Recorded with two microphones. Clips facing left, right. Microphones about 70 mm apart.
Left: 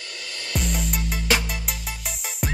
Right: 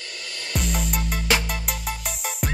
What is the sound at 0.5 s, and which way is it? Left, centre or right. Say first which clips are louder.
Music: right 1 dB; centre.